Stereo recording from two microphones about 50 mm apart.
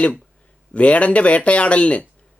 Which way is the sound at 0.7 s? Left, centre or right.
Left.